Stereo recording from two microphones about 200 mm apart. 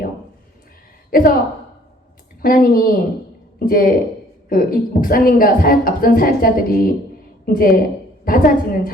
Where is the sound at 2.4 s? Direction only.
45° left (ahead or behind).